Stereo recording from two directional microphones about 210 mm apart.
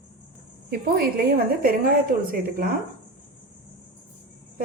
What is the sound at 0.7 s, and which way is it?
Speech, 50° right (ahead or behind).